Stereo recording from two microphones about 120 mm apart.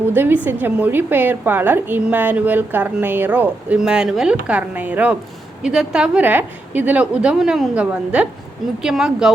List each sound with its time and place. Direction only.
0.1 s a woman's voice: 15° right (ahead or behind)